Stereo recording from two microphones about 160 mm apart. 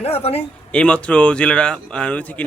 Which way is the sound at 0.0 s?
40° left (ahead or behind).